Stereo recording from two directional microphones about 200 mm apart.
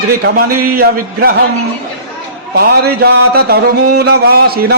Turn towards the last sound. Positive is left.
turn(degrees=-50)  # may be behind; listen again after turning